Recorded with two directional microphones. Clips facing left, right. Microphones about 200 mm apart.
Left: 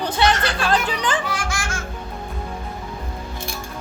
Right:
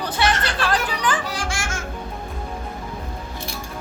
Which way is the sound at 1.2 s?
30° right (ahead or behind).